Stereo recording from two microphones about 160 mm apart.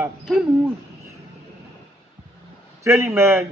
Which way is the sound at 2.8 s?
15° right (ahead or behind).